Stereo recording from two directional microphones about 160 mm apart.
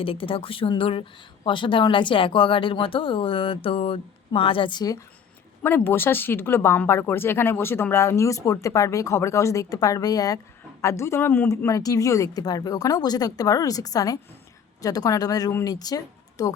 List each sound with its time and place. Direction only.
0.0 s speech: 35° left (ahead or behind)
5.6 s speech: 15° left (ahead or behind)